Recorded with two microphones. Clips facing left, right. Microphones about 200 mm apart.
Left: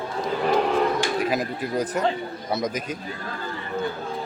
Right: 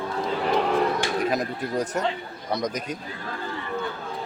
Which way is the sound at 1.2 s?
Centre (ahead or behind).